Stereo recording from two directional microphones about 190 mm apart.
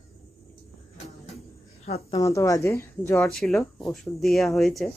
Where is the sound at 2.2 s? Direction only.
15° left (ahead or behind).